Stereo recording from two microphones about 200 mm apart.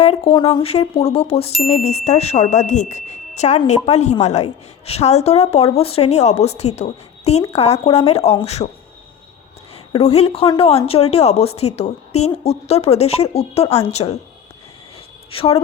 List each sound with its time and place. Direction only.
0.0 s a woman's voice: 25° left (ahead or behind)
10.0 s a woman's voice: 30° left (ahead or behind)
15.3 s a woman's voice: 30° left (ahead or behind)